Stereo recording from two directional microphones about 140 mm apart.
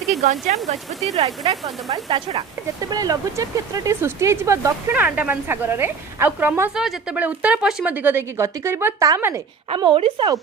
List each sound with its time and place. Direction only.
0.2 s speech: 55° right (ahead or behind)
1.2 s speech: 40° right (ahead or behind)
1.9 s speech: 30° right (ahead or behind)
4.9 s a woman's voice: 10° right (ahead or behind)
6.7 s a woman's voice: 5° right (ahead or behind)
9.7 s speech: 35° right (ahead or behind)